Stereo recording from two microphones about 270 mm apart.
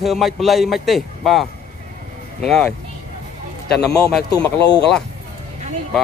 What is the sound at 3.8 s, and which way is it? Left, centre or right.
Speech, centre.